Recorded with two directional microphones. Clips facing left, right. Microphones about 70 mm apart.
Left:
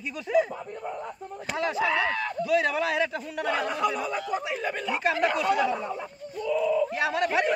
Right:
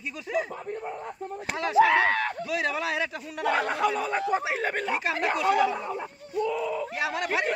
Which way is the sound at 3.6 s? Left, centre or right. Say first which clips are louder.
Right 1 dB; right.